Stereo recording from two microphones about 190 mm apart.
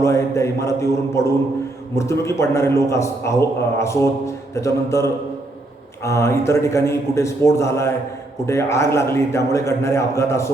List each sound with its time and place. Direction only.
0.0 s a man's voice: 15° left (ahead or behind)